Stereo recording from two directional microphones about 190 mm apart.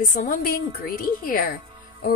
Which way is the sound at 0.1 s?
45° left (ahead or behind).